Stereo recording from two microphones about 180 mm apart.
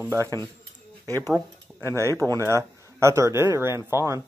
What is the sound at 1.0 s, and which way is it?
Speech, 15° left (ahead or behind).